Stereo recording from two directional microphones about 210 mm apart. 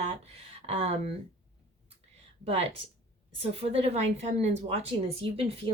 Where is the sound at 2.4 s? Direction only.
30° right (ahead or behind).